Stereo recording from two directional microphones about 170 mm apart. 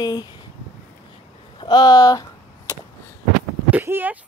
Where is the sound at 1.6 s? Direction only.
25° left (ahead or behind).